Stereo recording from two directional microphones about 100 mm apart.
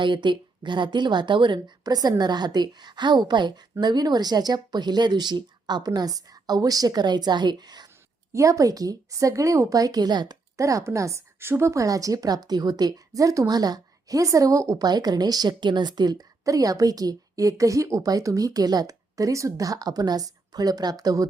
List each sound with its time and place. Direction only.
0.0 s speech: 50° right (ahead or behind)
8.3 s a woman's voice: 30° right (ahead or behind)
10.6 s a woman's voice: 30° right (ahead or behind)